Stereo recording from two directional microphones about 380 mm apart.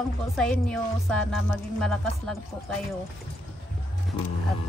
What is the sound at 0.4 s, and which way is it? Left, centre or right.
Speech, centre.